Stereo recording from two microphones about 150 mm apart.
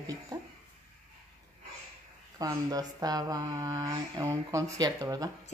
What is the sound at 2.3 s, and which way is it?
Speech, 25° right (ahead or behind).